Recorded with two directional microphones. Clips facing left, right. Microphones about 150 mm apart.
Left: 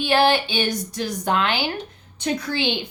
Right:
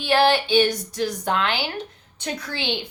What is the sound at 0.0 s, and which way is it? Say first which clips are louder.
A woman's voice: even; 15° left (ahead or behind).